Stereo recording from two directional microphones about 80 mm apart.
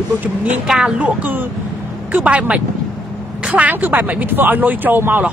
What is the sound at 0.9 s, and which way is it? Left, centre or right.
Speech, centre.